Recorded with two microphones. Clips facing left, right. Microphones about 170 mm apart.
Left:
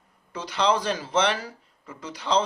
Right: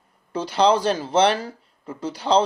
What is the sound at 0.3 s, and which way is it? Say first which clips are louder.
Speech: right 6 dB; 35° right (ahead or behind).